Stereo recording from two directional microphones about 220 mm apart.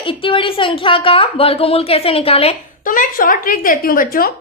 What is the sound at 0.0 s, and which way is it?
A woman's voice, 25° left (ahead or behind).